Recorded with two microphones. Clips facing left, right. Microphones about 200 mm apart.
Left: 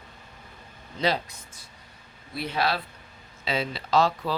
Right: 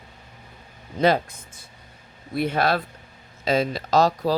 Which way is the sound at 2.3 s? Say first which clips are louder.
Right 5 dB; 50° right (ahead or behind).